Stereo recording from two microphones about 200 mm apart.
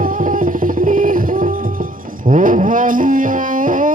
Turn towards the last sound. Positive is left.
turn(degrees=-40)  # may be behind; listen again after turning